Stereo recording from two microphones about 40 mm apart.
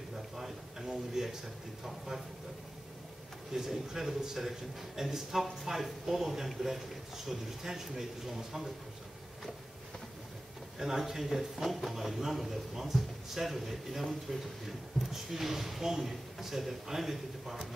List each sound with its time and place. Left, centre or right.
0.4 s a sound: centre
3.5 s a man's voice: centre
10.8 s speech: centre